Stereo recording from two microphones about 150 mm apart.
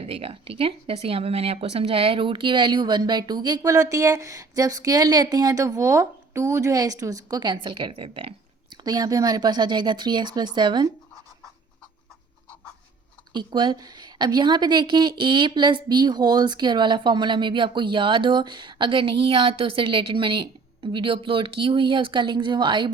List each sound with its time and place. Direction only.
0.0 s speech: 40° right (ahead or behind)
8.7 s speech: 25° right (ahead or behind)
13.3 s speech: 30° right (ahead or behind)